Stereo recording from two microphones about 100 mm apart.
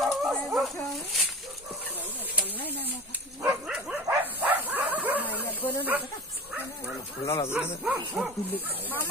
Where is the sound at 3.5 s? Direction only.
Centre (ahead or behind).